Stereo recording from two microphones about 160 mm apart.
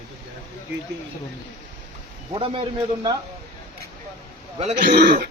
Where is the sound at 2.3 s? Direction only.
35° right (ahead or behind).